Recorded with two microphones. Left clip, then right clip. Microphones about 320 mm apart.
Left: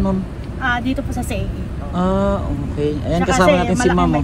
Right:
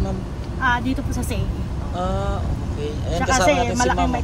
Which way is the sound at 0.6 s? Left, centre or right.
Centre.